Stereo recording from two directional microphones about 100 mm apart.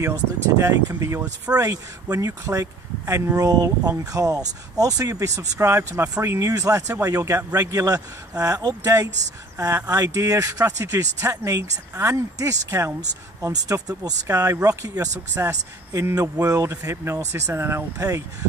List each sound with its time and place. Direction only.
0.0 s speech: 35° right (ahead or behind)